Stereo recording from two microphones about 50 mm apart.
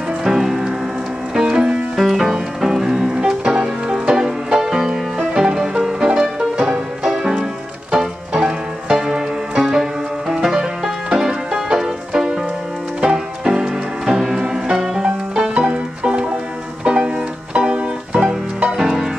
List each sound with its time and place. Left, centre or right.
0.2 s music: centre
2.0 s music: centre; by 18.8 s right
18.8 s music: centre